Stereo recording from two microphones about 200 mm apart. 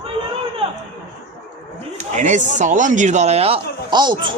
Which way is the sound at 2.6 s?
40° right (ahead or behind).